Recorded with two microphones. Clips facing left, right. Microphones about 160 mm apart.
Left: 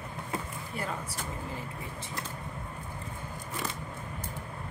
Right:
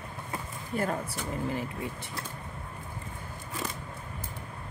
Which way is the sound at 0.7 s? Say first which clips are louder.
Right 7 dB; 45° right (ahead or behind).